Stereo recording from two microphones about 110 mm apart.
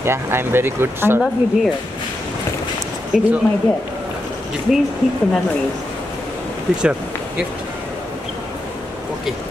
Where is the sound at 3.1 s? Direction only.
5° right (ahead or behind).